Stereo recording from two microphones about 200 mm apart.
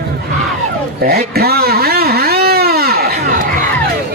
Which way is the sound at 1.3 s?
50° right (ahead or behind).